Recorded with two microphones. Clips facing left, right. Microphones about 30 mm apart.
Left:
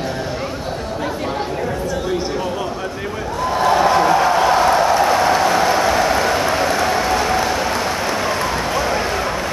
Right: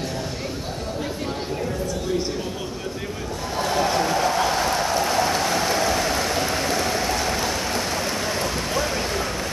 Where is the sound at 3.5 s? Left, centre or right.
Centre.